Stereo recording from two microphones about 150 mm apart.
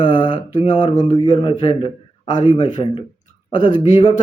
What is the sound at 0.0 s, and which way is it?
Mantra, 35° left (ahead or behind).